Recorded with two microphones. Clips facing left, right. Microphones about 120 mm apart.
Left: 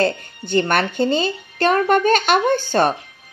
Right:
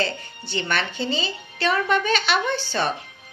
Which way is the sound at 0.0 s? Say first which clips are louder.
Left 7 dB; 50° left (ahead or behind).